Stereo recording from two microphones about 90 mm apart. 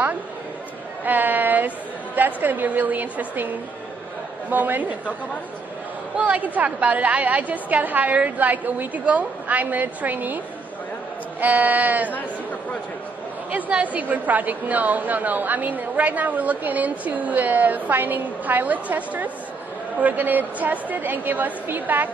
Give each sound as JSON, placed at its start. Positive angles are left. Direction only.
{"t": 1.0, "sound": "a woman's voice", "side_deg": -20}
{"t": 6.1, "sound": "a woman's voice", "side_deg": -15}
{"t": 11.4, "sound": "a woman's voice", "side_deg": -20}
{"t": 13.5, "sound": "a woman's voice", "side_deg": -15}